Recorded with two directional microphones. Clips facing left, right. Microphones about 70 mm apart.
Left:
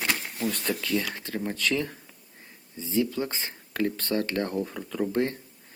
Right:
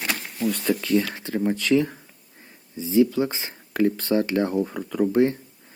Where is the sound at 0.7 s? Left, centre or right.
Centre.